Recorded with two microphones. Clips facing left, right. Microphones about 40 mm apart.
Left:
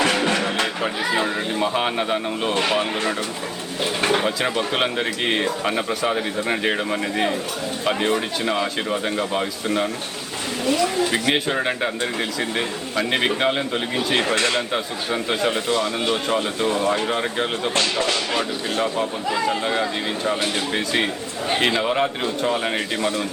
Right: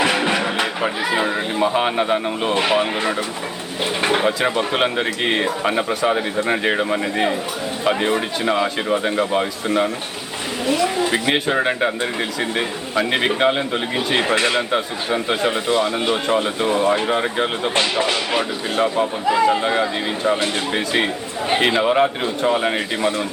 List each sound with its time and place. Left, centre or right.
0.0 s music: centre
0.8 s speech: centre
15.6 s speech: centre